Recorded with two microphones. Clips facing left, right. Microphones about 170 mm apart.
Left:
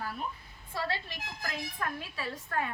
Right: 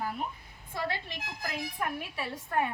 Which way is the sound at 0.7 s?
20° right (ahead or behind).